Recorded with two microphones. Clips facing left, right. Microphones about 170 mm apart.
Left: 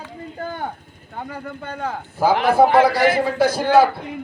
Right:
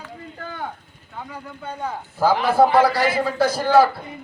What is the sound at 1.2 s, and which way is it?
Speech, 55° left (ahead or behind).